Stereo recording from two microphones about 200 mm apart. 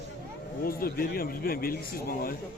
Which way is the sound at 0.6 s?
45° left (ahead or behind).